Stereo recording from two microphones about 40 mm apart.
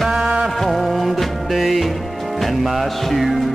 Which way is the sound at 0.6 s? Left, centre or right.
Centre.